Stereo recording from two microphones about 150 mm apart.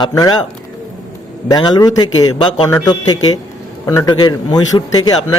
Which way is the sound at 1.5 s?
25° left (ahead or behind).